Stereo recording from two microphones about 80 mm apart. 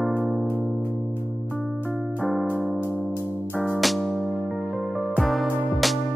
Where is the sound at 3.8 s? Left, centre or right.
Centre.